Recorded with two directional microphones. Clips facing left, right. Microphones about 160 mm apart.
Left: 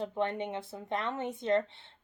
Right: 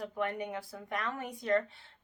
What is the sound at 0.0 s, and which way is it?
A woman's voice, 25° left (ahead or behind).